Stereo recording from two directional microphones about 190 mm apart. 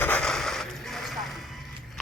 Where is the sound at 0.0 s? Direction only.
5° left (ahead or behind).